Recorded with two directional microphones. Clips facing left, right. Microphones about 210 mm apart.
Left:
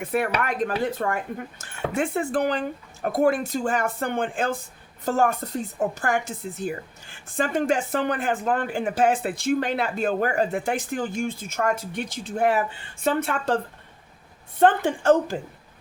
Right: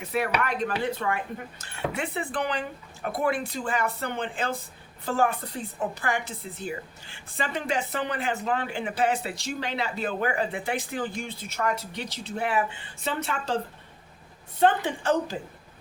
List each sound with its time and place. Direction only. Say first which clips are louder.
0.0 s speech: left 3 dB; 50° left (ahead or behind)
14.6 s speech: left 4 dB; 50° left (ahead or behind)